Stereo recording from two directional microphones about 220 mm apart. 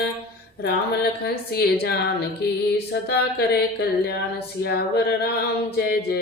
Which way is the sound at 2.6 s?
50° left (ahead or behind).